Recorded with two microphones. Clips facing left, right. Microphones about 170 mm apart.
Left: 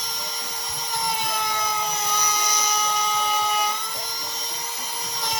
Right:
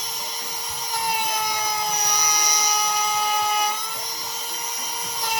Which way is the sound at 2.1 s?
15° right (ahead or behind).